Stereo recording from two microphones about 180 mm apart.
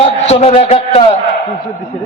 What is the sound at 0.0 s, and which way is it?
A man's voice, 35° left (ahead or behind).